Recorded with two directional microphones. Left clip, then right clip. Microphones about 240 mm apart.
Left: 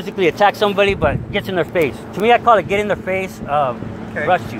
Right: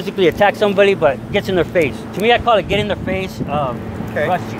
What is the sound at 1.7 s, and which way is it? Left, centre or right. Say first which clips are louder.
Speech: right 1 dB; centre.